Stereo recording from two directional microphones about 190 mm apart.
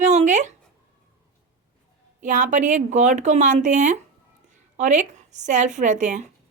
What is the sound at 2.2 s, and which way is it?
Speech, 40° right (ahead or behind).